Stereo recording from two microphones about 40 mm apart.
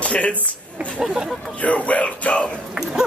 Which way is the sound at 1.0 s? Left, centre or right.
Centre.